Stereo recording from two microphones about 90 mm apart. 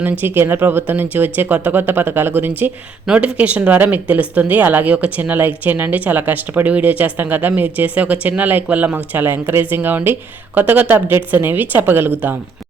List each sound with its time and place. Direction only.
0.0 s a woman's voice: 20° right (ahead or behind)
3.1 s a woman's voice: 10° right (ahead or behind)